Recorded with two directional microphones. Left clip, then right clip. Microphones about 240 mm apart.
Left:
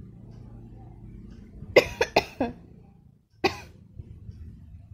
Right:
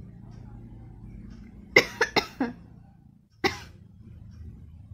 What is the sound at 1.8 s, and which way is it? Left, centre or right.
Cough, centre.